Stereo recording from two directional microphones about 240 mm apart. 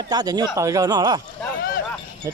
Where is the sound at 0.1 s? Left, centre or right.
Centre.